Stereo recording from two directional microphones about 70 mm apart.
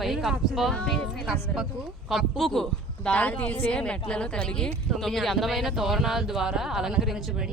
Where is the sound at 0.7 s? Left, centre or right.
Centre.